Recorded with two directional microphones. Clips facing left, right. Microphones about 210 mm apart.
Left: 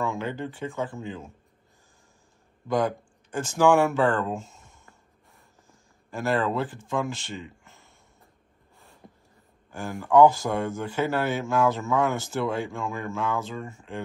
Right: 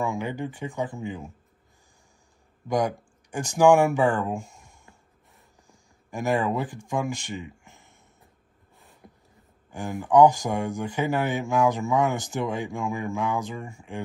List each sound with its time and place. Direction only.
0.0 s speech: 15° right (ahead or behind)
2.7 s speech: 15° right (ahead or behind)
6.0 s speech: 15° right (ahead or behind)
9.7 s speech: 15° right (ahead or behind)